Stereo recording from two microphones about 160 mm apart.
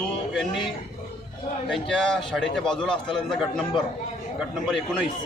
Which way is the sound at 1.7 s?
Centre (ahead or behind).